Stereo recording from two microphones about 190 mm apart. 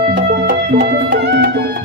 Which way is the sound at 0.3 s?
55° right (ahead or behind).